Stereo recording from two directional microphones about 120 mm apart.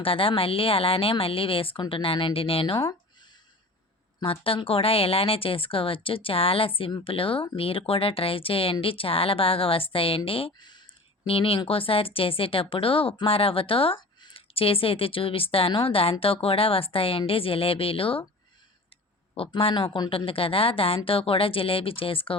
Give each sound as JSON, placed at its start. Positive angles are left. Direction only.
{"t": 0.0, "sound": "speech", "side_deg": 50}
{"t": 4.2, "sound": "speech", "side_deg": 50}
{"t": 11.3, "sound": "speech", "side_deg": 50}
{"t": 19.4, "sound": "speech", "side_deg": 50}